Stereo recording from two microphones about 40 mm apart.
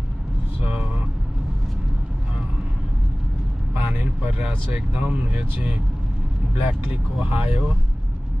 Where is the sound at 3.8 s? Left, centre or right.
Right.